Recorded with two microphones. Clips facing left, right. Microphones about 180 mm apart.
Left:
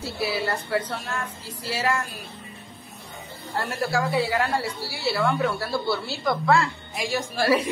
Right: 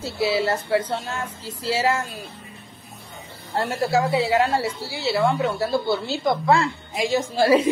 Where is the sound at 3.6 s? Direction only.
25° right (ahead or behind).